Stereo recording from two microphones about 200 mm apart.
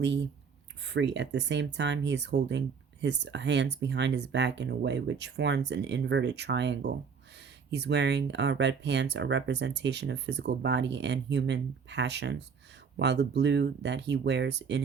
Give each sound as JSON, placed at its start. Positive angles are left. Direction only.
{"t": 0.0, "sound": "speech", "side_deg": -60}